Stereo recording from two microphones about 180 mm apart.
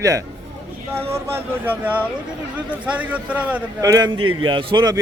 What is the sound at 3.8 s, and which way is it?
A man's voice, 20° right (ahead or behind).